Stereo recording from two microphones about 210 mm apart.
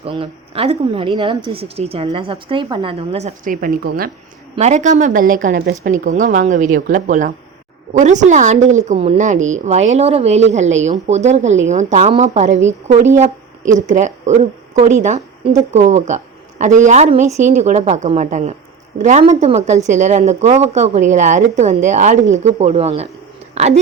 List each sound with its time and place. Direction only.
0.0 s a woman's voice: 25° right (ahead or behind)